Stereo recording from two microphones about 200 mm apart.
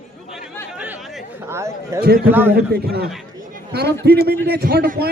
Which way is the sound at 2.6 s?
55° right (ahead or behind).